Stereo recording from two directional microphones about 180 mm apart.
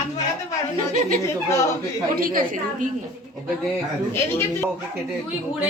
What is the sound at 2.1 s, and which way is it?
Speech, 50° right (ahead or behind).